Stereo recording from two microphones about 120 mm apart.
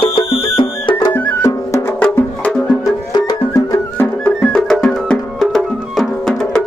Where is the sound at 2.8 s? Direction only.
30° left (ahead or behind).